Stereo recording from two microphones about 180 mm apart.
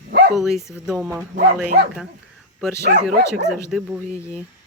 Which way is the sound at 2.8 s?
60° right (ahead or behind).